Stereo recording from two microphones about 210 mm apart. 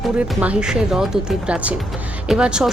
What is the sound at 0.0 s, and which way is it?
A woman's voice, 5° right (ahead or behind).